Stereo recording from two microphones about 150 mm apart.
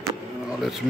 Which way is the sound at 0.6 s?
Centre (ahead or behind).